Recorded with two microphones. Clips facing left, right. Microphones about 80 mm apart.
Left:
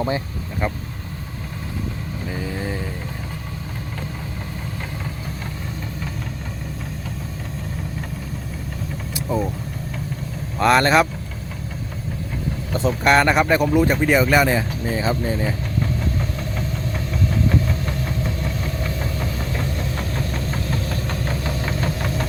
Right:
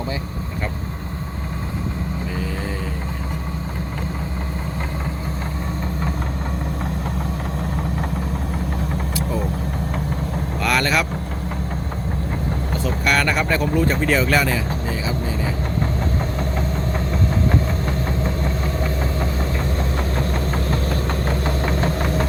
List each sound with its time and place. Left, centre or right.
10.6 s vehicle: left
12.8 s speech: left
14.4 s speech: left
17.5 s engine: right
21.4 s vehicle: right